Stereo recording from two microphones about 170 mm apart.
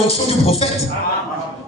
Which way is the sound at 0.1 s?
35° left (ahead or behind).